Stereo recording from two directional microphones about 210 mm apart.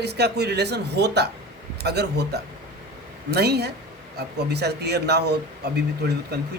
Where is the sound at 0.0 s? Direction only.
50° right (ahead or behind).